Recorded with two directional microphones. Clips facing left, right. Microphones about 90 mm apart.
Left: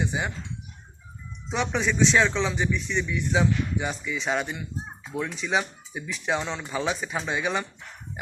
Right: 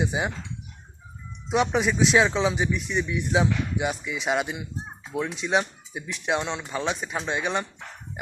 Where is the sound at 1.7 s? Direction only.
5° right (ahead or behind).